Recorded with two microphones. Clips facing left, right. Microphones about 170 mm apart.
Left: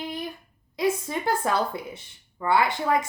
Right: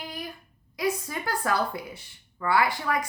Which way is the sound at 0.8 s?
25° left (ahead or behind).